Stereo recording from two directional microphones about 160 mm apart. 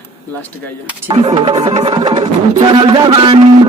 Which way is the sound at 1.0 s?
30° right (ahead or behind).